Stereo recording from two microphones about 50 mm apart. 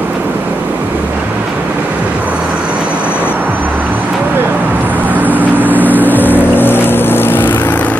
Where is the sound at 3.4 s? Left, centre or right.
Right.